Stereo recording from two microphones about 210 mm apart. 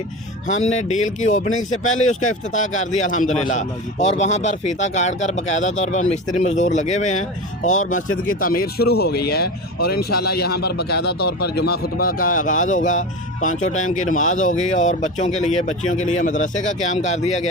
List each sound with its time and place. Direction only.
0.4 s speech: 35° left (ahead or behind)